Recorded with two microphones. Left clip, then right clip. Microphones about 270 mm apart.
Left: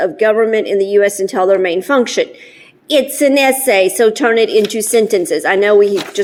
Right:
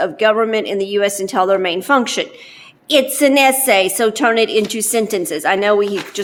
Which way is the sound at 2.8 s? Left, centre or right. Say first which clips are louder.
Left 1 dB; centre.